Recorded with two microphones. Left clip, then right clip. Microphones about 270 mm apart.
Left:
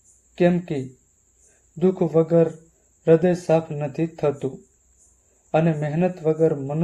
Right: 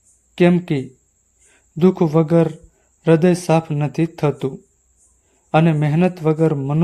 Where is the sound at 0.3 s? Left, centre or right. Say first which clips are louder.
Right 4 dB; right.